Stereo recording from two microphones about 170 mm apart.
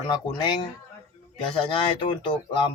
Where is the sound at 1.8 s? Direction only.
30° left (ahead or behind).